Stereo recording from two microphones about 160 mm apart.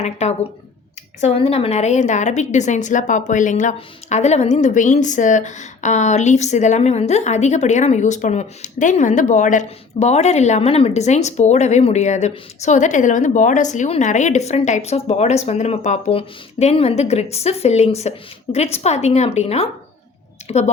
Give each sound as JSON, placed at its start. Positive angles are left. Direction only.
{"t": 0.0, "sound": "speech", "side_deg": 45}